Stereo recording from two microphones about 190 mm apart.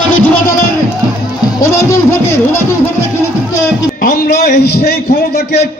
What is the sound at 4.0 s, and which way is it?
A man's voice, 50° left (ahead or behind).